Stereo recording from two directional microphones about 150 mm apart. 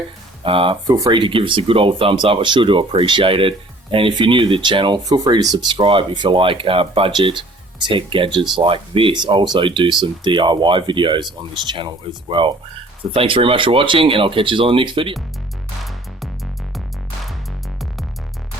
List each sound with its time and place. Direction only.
0.4 s speech: 35° right (ahead or behind)
0.9 s speech: 20° right (ahead or behind)
1.2 s speech: 35° right (ahead or behind)
15.8 s music: centre (ahead or behind)